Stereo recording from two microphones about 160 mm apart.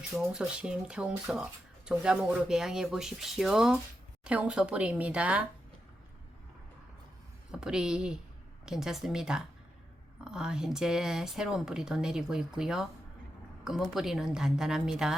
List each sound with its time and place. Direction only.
0.3 s speech: 5° right (ahead or behind)
7.5 s speech: 5° right (ahead or behind)